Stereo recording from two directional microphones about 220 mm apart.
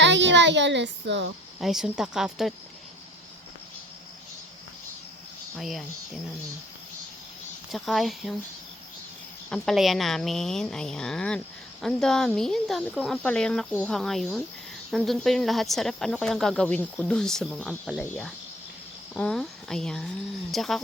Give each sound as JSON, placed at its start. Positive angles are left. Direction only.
{"t": 0.0, "sound": "a child's voice", "side_deg": -55}
{"t": 1.5, "sound": "speech", "side_deg": 0}
{"t": 5.5, "sound": "speech", "side_deg": 0}
{"t": 7.7, "sound": "speech", "side_deg": 0}
{"t": 9.5, "sound": "speech", "side_deg": 0}